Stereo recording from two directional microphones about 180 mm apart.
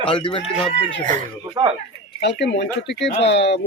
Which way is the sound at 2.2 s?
70° left (ahead or behind).